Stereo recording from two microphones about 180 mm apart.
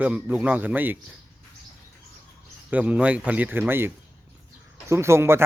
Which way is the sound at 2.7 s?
5° right (ahead or behind).